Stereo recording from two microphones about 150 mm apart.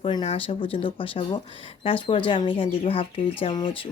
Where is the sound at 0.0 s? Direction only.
35° left (ahead or behind).